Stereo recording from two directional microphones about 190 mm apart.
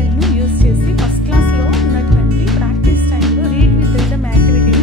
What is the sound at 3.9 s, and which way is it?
Music, centre (ahead or behind).